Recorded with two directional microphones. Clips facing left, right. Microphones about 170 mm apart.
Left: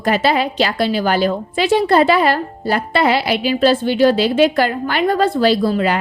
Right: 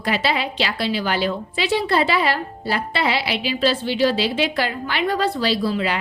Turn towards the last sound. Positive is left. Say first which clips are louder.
# left 5 dB
turn(degrees=45)  # may be behind; listen again after turning